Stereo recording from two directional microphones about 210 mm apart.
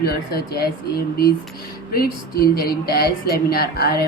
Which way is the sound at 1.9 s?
45° left (ahead or behind).